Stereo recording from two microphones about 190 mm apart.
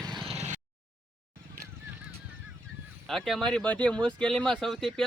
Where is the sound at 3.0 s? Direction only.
Centre (ahead or behind).